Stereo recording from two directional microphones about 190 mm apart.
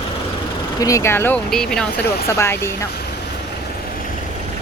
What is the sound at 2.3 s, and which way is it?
Speech, 15° left (ahead or behind).